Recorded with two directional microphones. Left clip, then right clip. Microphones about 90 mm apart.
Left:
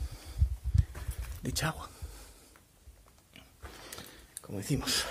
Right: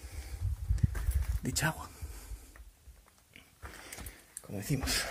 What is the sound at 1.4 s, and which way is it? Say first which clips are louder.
Speech: right 1 dB; 15° right (ahead or behind).